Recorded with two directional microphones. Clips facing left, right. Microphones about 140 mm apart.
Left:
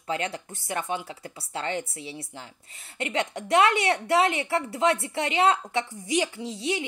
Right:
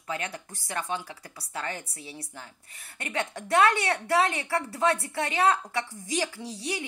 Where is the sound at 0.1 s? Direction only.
25° left (ahead or behind).